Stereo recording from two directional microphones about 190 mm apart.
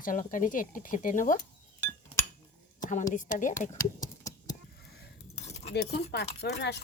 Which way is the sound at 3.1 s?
45° left (ahead or behind).